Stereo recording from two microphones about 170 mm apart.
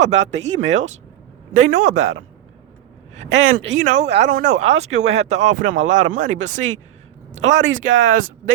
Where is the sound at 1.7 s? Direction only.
45° right (ahead or behind).